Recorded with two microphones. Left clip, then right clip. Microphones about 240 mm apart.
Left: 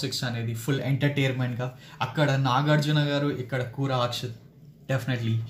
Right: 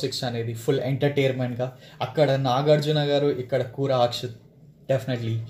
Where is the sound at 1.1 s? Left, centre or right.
Left.